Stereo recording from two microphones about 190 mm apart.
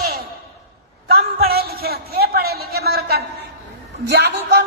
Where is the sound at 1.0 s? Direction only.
55° right (ahead or behind).